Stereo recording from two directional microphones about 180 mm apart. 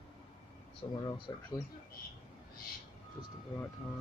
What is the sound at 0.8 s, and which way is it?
Speech, 25° left (ahead or behind).